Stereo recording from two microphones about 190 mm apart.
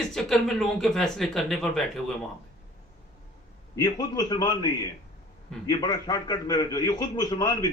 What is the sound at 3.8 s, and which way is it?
A man's voice, 20° left (ahead or behind).